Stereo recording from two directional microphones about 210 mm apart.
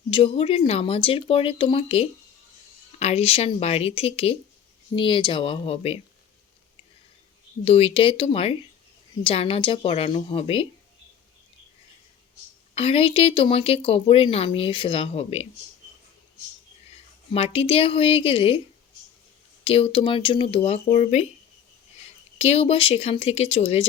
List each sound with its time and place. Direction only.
0.1 s speech: 25° left (ahead or behind)
7.6 s speech: 30° left (ahead or behind)
12.7 s speech: 30° left (ahead or behind)
17.3 s speech: 30° left (ahead or behind)
19.6 s speech: 25° left (ahead or behind)
22.4 s speech: 30° left (ahead or behind)